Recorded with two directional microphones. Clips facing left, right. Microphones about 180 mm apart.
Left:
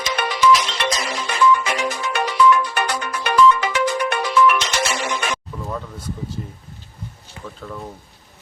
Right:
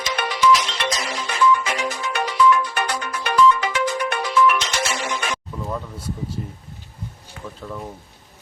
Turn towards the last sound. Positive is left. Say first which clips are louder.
# even
turn(degrees=-5)  # may be behind; listen again after turning